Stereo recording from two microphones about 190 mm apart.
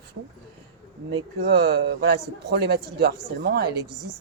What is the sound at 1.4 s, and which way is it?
Speech, 65° right (ahead or behind).